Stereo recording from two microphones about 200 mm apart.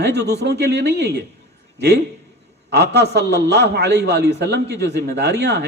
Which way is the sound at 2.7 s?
55° right (ahead or behind).